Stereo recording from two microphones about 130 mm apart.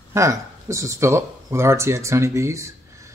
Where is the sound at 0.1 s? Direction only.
25° right (ahead or behind).